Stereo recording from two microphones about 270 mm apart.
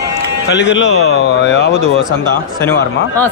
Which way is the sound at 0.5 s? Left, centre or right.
Left.